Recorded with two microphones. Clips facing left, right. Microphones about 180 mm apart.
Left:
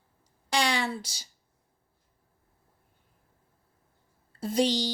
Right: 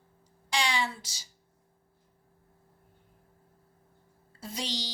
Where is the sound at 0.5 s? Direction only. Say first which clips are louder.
Left 3 dB; 60° left (ahead or behind).